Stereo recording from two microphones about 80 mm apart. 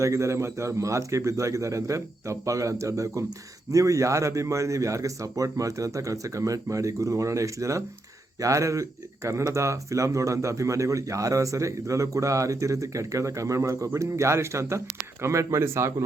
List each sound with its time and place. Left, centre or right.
0.0 s speech: right